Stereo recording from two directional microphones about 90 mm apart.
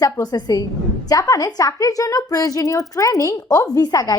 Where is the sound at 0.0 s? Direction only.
45° left (ahead or behind).